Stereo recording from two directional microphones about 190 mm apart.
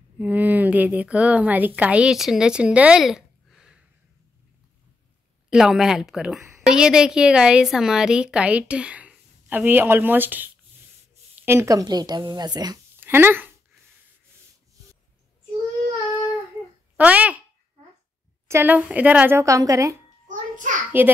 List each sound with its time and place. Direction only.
0.2 s speech: 10° right (ahead or behind)
5.5 s a woman's voice: 5° right (ahead or behind)
16.9 s a child's voice: 5° right (ahead or behind)
18.5 s a woman's voice: 10° right (ahead or behind)
20.2 s a sound: 40° right (ahead or behind)
21.0 s a woman's voice: 10° right (ahead or behind)